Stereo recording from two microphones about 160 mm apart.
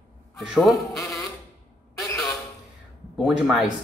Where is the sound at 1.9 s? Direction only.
20° left (ahead or behind).